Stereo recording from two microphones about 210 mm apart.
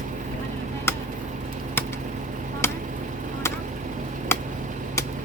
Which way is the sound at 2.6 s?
10° left (ahead or behind).